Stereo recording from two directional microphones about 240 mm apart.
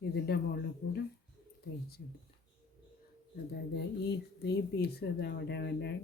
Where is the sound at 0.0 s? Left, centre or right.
Left.